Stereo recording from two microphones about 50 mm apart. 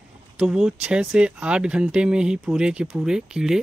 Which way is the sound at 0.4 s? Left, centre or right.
Centre.